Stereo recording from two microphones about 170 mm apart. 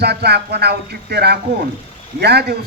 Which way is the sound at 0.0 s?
75° right (ahead or behind).